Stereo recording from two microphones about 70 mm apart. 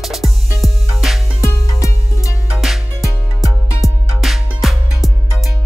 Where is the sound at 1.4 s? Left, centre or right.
Left.